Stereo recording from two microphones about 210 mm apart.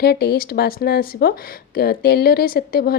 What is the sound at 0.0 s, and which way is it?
Speech, 50° left (ahead or behind).